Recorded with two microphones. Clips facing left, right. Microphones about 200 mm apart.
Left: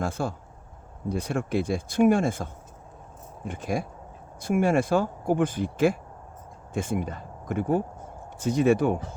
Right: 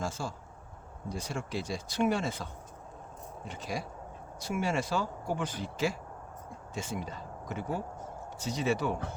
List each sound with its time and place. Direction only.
0.0 s speech: 60° left (ahead or behind)